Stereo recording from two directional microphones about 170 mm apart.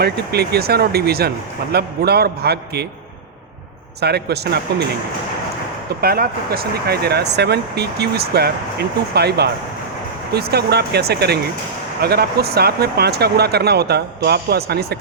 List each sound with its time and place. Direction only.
0.0 s speech: 70° right (ahead or behind)
4.0 s speech: 75° right (ahead or behind)
6.0 s speech: 60° right (ahead or behind)